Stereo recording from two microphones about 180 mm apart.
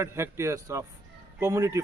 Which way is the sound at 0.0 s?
15° right (ahead or behind).